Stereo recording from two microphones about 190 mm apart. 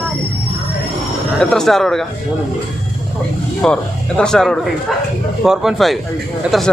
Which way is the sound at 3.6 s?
5° left (ahead or behind).